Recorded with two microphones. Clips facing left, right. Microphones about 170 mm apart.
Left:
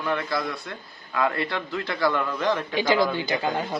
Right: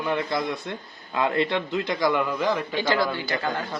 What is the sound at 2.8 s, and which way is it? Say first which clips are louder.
Speech: left 2 dB; 15° left (ahead or behind).